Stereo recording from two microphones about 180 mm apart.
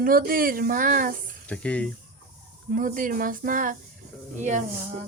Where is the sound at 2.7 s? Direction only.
50° right (ahead or behind).